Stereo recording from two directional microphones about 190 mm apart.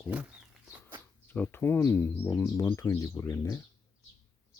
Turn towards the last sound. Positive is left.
turn(degrees=15)  # may be behind; listen again after turning